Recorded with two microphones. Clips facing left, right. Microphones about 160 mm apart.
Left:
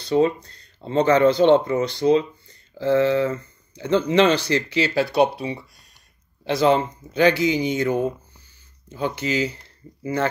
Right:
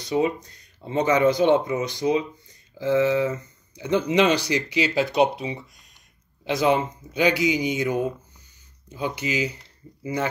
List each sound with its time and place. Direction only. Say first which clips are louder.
0.0 s speech: left 4 dB; 15° right (ahead or behind)
5.0 s speech: left 2 dB; 35° left (ahead or behind)
6.4 s speech: left 3 dB; 15° right (ahead or behind)